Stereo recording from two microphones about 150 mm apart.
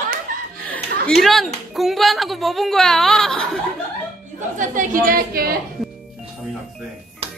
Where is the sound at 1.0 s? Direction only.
Centre (ahead or behind).